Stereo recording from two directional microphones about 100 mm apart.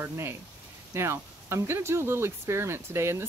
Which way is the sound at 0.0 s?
25° right (ahead or behind).